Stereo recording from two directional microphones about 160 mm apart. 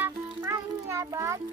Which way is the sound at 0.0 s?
15° right (ahead or behind).